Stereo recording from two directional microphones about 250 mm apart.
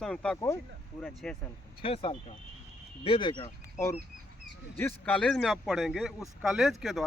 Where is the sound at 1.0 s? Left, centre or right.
Centre.